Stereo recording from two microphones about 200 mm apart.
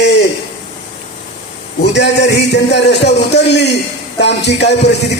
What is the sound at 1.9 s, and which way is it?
A man's voice, 60° left (ahead or behind).